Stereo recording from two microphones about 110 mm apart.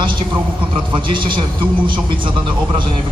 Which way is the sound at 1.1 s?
50° right (ahead or behind).